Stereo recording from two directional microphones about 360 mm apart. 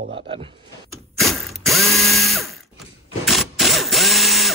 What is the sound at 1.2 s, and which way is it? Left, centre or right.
Ratchet, centre.